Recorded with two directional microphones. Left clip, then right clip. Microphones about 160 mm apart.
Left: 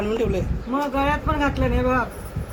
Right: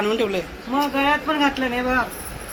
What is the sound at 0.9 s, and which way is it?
Speech, 90° left.